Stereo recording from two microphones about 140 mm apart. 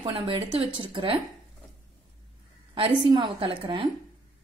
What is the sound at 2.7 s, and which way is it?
A woman's voice, 40° right (ahead or behind).